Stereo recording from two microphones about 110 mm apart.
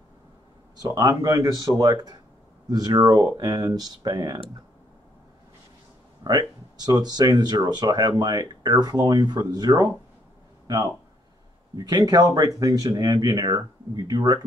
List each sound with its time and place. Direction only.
0.8 s speech: 35° right (ahead or behind)
6.2 s speech: 40° right (ahead or behind)
11.7 s speech: 35° right (ahead or behind)